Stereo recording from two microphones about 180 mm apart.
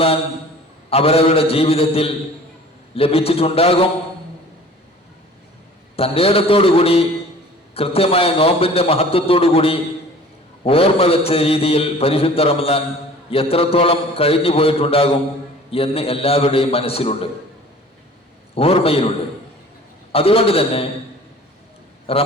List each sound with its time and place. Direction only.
0.9 s a man's voice: 35° left (ahead or behind)
6.0 s a man's voice: 30° left (ahead or behind)
18.5 s a man's voice: 30° left (ahead or behind)
20.1 s a man's voice: 30° left (ahead or behind)
22.1 s a man's voice: 30° left (ahead or behind)